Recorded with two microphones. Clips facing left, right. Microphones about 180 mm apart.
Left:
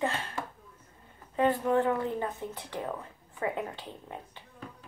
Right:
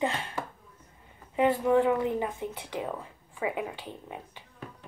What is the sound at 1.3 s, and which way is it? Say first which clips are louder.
Speech: right 2 dB; 15° right (ahead or behind).